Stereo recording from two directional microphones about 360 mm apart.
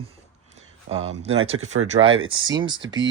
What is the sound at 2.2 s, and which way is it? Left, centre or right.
Speech, centre.